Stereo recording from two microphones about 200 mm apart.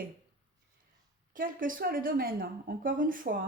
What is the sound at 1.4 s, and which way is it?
A woman's voice, 45° right (ahead or behind).